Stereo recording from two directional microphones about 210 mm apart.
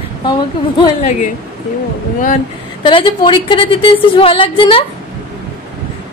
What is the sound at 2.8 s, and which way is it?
A woman's voice, 25° left (ahead or behind).